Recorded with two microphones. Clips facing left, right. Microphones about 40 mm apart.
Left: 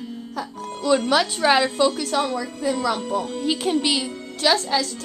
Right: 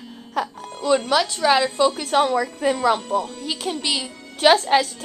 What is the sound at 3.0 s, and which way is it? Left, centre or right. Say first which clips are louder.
Speech: right 2 dB; centre.